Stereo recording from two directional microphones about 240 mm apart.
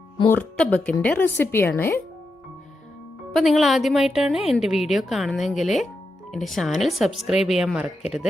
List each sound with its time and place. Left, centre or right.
0.3 s speech: centre
3.3 s a woman's voice: centre